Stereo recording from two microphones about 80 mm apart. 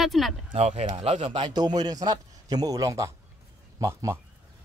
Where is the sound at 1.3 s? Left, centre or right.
Right.